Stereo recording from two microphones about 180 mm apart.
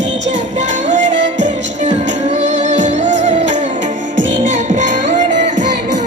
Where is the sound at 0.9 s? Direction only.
40° right (ahead or behind).